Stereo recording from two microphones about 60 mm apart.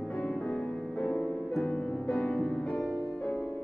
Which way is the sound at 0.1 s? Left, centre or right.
Centre.